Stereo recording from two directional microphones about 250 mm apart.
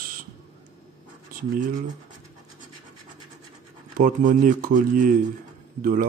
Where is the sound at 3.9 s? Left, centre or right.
Right.